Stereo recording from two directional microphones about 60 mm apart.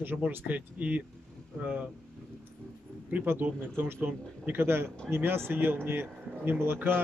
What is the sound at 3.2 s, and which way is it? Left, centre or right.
A man's voice, right.